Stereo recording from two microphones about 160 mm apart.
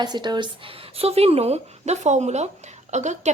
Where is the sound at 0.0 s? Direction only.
25° right (ahead or behind).